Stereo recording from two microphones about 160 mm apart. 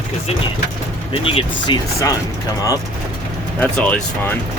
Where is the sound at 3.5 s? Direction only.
10° left (ahead or behind).